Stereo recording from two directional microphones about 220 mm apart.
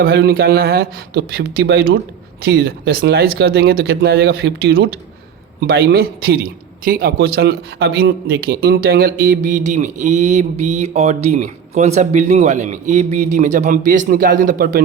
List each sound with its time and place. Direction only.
0.0 s speech: 45° right (ahead or behind)